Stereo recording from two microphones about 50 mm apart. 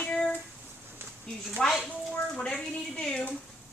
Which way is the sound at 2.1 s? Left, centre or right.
Left.